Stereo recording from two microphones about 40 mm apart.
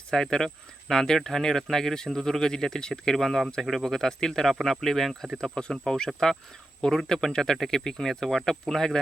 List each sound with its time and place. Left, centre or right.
0.1 s speech: centre
5.4 s cricket: left
5.7 s speech: centre